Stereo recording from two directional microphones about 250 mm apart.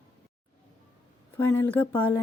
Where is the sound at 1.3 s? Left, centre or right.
Centre.